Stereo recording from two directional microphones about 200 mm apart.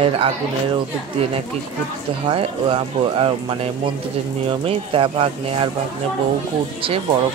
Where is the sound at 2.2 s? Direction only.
30° right (ahead or behind).